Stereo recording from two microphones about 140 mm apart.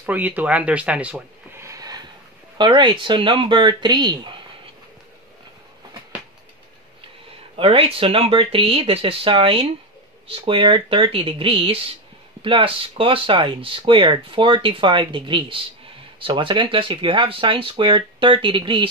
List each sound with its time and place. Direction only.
0.0 s speech: 15° right (ahead or behind)
1.6 s a sound: 25° right (ahead or behind)
2.5 s speech: 35° right (ahead or behind)
7.5 s speech: 40° right (ahead or behind)